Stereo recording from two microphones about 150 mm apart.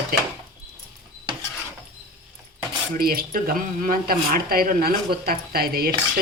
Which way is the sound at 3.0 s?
90° right.